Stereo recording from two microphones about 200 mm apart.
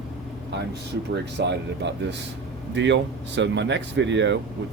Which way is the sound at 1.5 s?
60° right (ahead or behind).